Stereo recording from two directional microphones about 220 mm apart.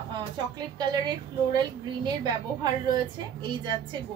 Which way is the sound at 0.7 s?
20° right (ahead or behind).